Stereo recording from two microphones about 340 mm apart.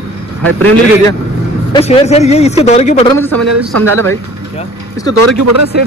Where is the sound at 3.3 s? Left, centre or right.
Right.